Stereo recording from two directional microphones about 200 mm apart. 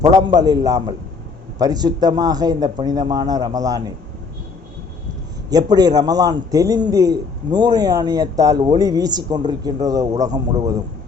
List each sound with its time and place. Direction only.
0.1 s a man's voice: 20° right (ahead or behind)
5.5 s a man's voice: 20° right (ahead or behind)